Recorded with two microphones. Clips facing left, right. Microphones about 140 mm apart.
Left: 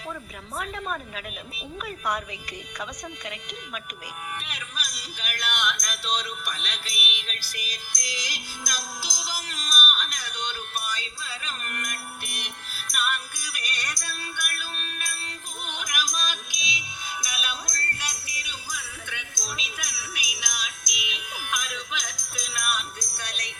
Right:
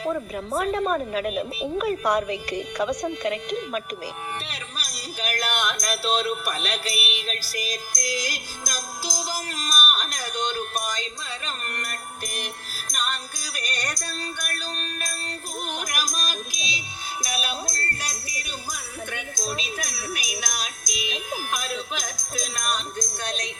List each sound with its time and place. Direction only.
0.0 s speech: 40° right (ahead or behind)
4.4 s music: 35° right (ahead or behind)